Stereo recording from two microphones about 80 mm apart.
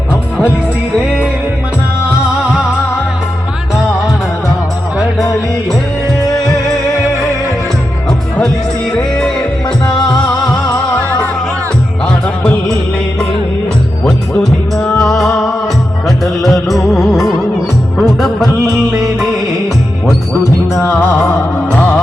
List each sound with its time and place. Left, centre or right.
0.9 s music: centre
9.0 s music: centre
12.0 s music: centre
15.0 s music: centre
20.8 s music: left